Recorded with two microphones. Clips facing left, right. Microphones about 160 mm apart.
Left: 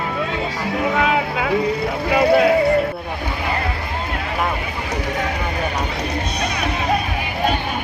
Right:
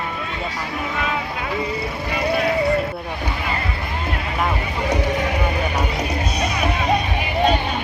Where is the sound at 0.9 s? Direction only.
90° left.